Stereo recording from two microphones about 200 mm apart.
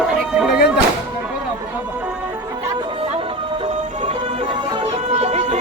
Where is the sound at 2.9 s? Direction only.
25° right (ahead or behind).